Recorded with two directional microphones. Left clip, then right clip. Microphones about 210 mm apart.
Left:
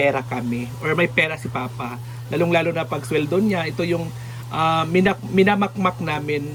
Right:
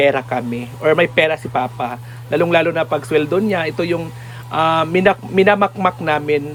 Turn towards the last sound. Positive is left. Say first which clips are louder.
# right 7 dB
turn(degrees=-5)  # may be behind; listen again after turning